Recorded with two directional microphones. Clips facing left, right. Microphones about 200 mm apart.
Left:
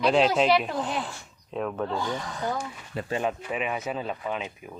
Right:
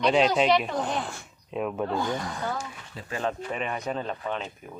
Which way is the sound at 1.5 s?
10° right (ahead or behind).